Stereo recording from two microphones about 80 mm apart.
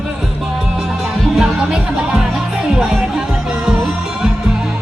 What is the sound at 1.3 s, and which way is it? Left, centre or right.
Music, centre.